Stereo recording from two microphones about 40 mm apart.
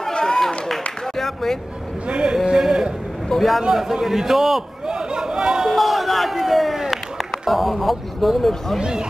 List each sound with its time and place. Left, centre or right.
0.1 s a sound: centre
1.1 s speech: centre
2.0 s speech: right
2.3 s a sound: centre
3.3 s a man's voice: centre
3.6 s a man's voice: centre
4.8 s chatter: centre
5.8 s a sound: centre
6.9 s speech: centre
8.7 s speech: centre